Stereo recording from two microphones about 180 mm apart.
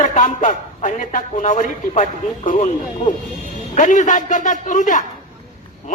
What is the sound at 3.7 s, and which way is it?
A man's voice, 45° left (ahead or behind).